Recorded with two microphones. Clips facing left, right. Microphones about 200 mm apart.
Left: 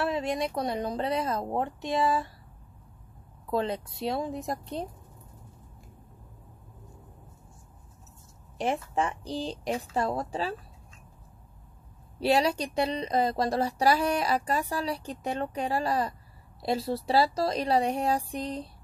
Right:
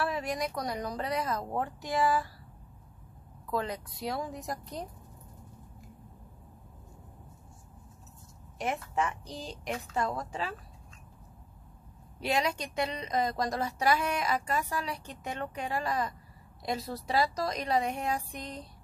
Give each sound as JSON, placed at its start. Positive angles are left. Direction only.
{"t": 0.0, "sound": "speech", "side_deg": 25}
{"t": 3.4, "sound": "speech", "side_deg": 25}
{"t": 8.5, "sound": "speech", "side_deg": 30}
{"t": 12.2, "sound": "speech", "side_deg": 35}